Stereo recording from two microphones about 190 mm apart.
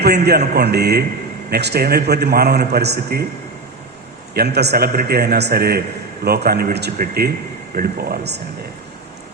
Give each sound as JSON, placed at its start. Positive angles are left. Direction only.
{"t": 0.0, "sound": "a man's voice", "side_deg": -60}
{"t": 4.4, "sound": "a man's voice", "side_deg": -60}